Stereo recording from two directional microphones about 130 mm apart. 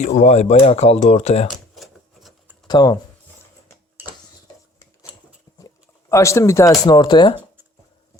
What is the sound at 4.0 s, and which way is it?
Dishes, 15° right (ahead or behind).